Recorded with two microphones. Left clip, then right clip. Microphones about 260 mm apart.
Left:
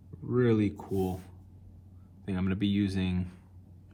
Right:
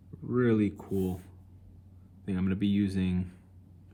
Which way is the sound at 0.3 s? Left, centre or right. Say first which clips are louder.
Even; centre.